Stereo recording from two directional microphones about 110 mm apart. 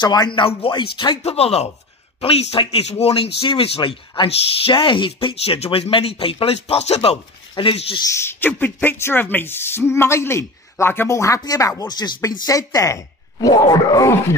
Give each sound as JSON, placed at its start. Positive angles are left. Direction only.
{"t": 0.0, "sound": "speech", "side_deg": 40}
{"t": 0.7, "sound": "speech", "side_deg": 45}
{"t": 1.2, "sound": "speech", "side_deg": 65}
{"t": 6.4, "sound": "speech", "side_deg": 65}
{"t": 8.0, "sound": "speech", "side_deg": 25}